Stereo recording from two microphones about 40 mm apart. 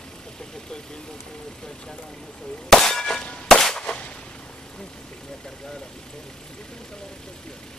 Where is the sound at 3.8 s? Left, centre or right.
Left.